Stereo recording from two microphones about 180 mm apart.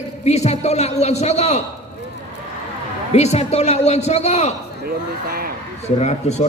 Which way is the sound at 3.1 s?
35° left (ahead or behind).